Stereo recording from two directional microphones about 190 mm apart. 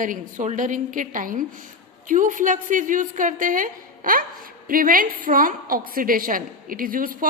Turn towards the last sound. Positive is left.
turn(degrees=-50)  # may be behind; listen again after turning